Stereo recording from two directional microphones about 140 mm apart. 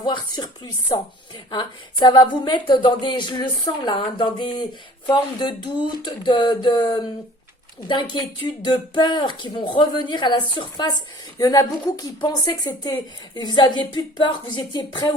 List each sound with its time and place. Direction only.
0.0 s speech: 30° left (ahead or behind)
8.4 s speech: 35° left (ahead or behind)